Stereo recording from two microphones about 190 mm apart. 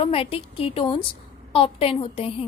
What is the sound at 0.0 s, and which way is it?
A woman's voice, 30° left (ahead or behind).